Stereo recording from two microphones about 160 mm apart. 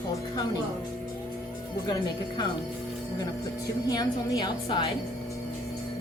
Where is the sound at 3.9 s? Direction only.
25° left (ahead or behind).